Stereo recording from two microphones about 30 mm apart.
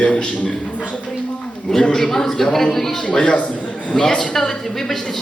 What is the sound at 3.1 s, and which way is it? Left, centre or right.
Speech, left.